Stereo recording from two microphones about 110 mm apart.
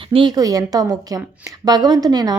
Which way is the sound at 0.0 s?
50° right (ahead or behind).